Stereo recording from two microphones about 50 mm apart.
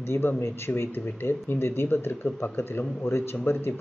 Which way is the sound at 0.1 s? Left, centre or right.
Left.